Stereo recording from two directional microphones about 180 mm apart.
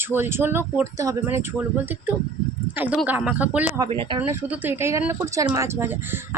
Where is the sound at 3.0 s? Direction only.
10° right (ahead or behind).